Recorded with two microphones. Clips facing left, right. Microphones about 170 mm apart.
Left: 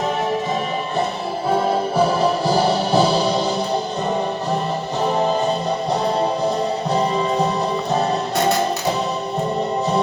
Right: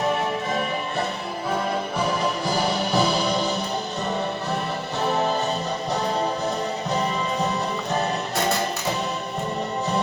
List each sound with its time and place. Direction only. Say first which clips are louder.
2.0 s music: left 8 dB; 35° left (ahead or behind)